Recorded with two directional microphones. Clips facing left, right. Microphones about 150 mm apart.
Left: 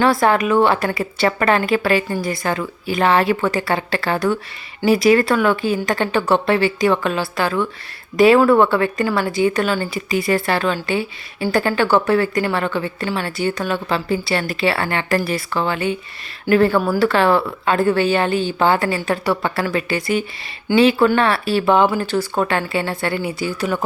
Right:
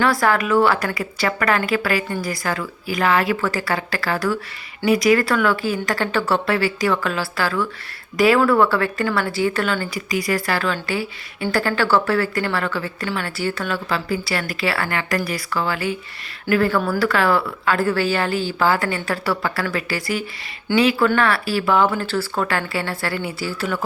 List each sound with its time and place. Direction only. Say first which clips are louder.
0.0 s a woman's voice: left 3 dB; 25° left (ahead or behind)